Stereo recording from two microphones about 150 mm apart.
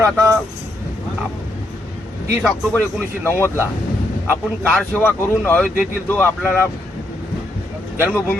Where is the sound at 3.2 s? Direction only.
15° left (ahead or behind).